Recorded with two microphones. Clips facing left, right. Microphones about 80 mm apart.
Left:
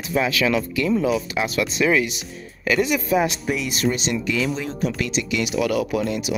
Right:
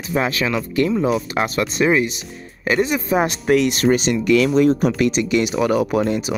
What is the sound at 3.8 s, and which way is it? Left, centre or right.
Speech, right.